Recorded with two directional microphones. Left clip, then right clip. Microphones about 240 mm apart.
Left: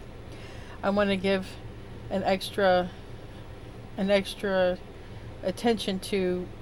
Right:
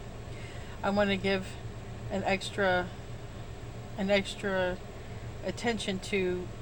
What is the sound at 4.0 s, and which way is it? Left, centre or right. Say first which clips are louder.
Speech: left 3 dB; left.